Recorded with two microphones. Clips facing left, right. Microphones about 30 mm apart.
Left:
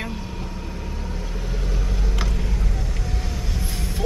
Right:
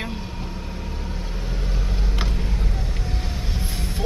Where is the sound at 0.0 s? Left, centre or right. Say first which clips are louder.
Even; centre.